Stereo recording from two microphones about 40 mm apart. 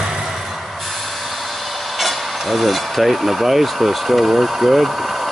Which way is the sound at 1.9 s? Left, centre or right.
Centre.